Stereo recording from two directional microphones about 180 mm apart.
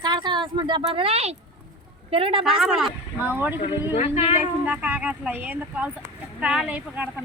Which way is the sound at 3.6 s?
35° left (ahead or behind).